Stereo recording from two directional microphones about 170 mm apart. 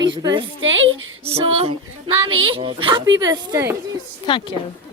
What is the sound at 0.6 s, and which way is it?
Speech, 90° right.